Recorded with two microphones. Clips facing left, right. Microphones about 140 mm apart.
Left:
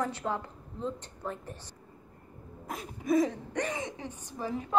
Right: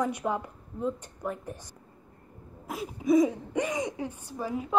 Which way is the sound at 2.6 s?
5° right (ahead or behind).